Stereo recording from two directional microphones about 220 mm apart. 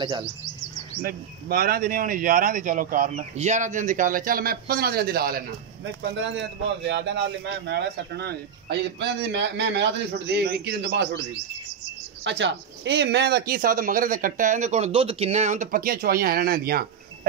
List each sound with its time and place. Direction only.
1.0 s speech: 40° right (ahead or behind)
6.8 s speech: 50° right (ahead or behind)
12.3 s speech: 55° right (ahead or behind)